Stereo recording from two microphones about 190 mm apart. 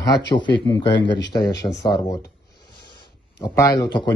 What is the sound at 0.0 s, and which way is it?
Speech, 20° left (ahead or behind).